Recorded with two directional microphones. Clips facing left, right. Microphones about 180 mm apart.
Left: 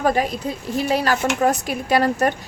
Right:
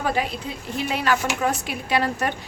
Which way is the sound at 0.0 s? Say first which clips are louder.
Left 5 dB; 40° left (ahead or behind).